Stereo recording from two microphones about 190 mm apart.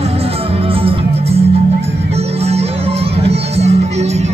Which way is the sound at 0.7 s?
30° right (ahead or behind).